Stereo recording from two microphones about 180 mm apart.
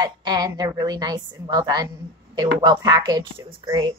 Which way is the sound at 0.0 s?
25° right (ahead or behind).